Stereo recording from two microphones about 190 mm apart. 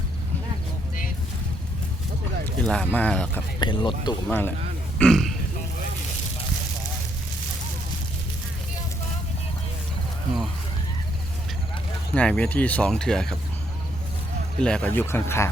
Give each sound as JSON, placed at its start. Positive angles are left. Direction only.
{"t": 2.6, "sound": "speech", "side_deg": 5}
{"t": 3.6, "sound": "speech", "side_deg": 25}
{"t": 4.3, "sound": "speech", "side_deg": 10}
{"t": 12.1, "sound": "speech", "side_deg": 5}
{"t": 14.6, "sound": "speech", "side_deg": 5}